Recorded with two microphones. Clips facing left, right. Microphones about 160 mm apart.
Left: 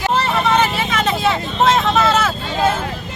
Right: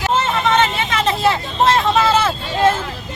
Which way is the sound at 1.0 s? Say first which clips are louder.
Right 3 dB; centre (ahead or behind).